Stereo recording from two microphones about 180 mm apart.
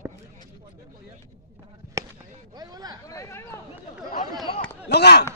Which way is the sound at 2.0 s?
15° right (ahead or behind).